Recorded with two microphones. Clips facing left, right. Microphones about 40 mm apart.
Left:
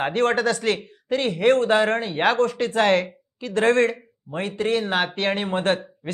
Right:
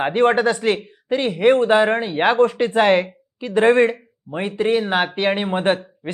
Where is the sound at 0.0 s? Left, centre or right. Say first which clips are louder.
Right 4 dB; centre.